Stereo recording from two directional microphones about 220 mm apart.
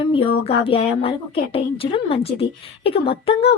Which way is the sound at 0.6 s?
25° left (ahead or behind).